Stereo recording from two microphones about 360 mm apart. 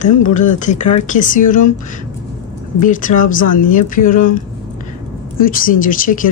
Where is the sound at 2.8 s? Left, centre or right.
Left.